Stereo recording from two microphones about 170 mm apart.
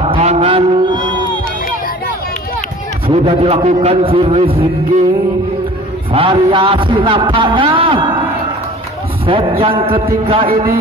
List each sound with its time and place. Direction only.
0.1 s a sound: 35° right (ahead or behind)
3.1 s a man's voice: 35° right (ahead or behind)
6.1 s a man's voice: 35° right (ahead or behind)